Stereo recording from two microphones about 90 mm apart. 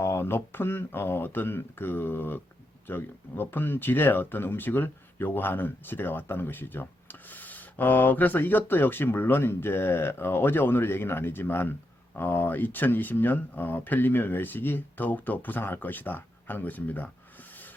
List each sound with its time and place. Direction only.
0.0 s speech: 30° left (ahead or behind)
17.5 s rub: 20° left (ahead or behind)